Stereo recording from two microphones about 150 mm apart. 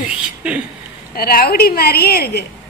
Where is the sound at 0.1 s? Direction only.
10° right (ahead or behind).